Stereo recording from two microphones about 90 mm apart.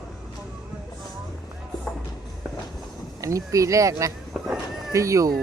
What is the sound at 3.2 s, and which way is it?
Speech, 35° right (ahead or behind).